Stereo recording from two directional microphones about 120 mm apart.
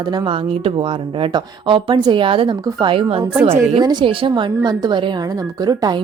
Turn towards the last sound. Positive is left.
turn(degrees=-35)  # may be behind; listen again after turning